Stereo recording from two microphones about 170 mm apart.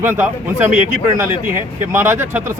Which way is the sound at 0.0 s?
15° right (ahead or behind).